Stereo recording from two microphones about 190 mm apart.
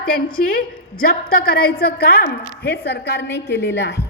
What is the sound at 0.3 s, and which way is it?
A woman's voice, 50° left (ahead or behind).